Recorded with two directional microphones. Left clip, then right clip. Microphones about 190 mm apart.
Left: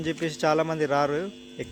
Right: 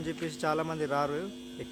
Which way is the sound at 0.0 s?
30° left (ahead or behind).